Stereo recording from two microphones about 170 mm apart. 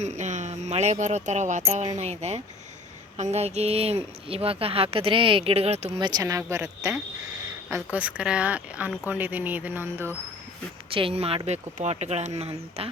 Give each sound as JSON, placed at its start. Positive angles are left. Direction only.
{"t": 0.0, "sound": "speech", "side_deg": -45}
{"t": 6.0, "sound": "speech", "side_deg": -25}
{"t": 10.9, "sound": "speech", "side_deg": -35}